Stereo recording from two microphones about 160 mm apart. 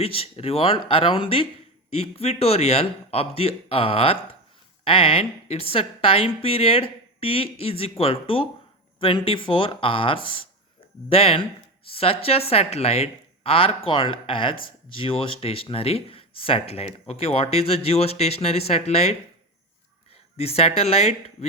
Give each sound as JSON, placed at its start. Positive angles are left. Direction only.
{"t": 0.0, "sound": "speech", "side_deg": 35}
{"t": 20.3, "sound": "speech", "side_deg": 40}